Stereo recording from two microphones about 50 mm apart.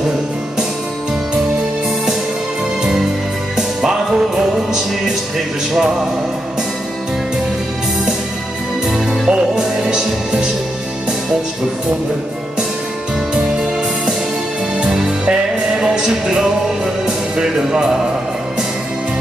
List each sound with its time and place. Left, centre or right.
2.8 s music: centre
8.8 s music: centre
13.3 s music: centre